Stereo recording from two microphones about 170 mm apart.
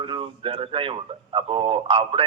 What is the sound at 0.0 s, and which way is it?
A man's voice, 30° right (ahead or behind).